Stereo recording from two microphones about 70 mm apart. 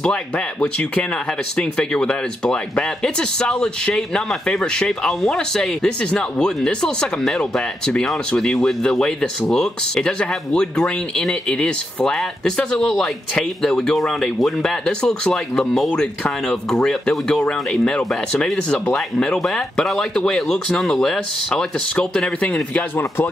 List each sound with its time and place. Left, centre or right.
0.0 s speech: centre
22.4 s a man's voice: left
22.9 s speech: left